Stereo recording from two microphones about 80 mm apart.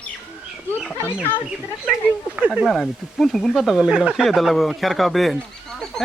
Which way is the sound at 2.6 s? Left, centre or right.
Centre.